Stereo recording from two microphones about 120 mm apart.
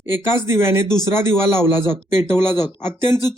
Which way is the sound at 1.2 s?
20° right (ahead or behind).